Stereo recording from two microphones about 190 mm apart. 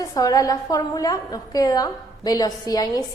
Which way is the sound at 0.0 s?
20° left (ahead or behind).